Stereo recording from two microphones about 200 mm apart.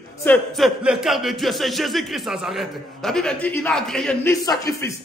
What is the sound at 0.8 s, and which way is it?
A man's voice, 5° right (ahead or behind).